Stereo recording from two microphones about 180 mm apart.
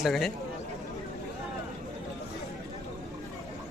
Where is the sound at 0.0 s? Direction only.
Centre (ahead or behind).